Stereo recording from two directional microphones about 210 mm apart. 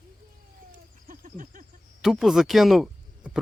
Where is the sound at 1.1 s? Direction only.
40° right (ahead or behind).